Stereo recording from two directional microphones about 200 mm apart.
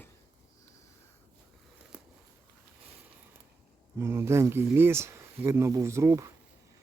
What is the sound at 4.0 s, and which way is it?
Speech, 15° right (ahead or behind).